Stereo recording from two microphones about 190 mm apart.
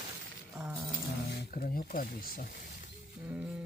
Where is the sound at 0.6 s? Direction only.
10° right (ahead or behind).